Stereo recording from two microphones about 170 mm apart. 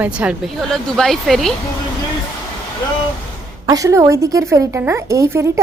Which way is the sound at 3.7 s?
20° right (ahead or behind).